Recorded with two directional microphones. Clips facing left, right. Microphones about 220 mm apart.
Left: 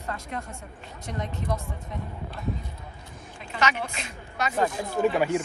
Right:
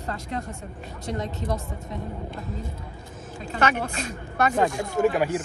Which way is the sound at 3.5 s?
50° right (ahead or behind).